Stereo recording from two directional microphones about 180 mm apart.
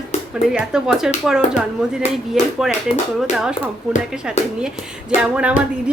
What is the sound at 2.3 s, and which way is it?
Speech, centre (ahead or behind).